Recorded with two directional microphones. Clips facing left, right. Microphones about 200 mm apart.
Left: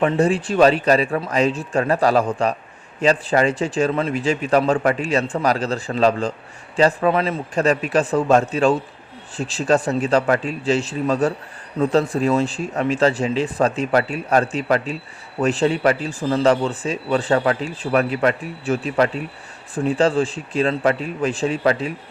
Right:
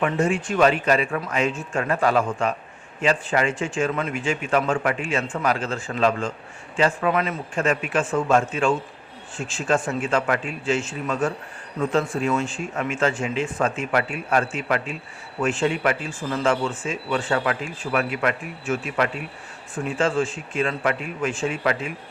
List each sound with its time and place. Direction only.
0.0 s speech: 35° left (ahead or behind)